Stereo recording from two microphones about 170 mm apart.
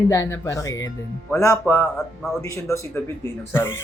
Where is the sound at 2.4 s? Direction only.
20° left (ahead or behind).